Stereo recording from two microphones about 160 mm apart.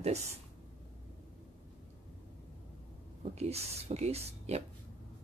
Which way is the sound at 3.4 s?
40° right (ahead or behind).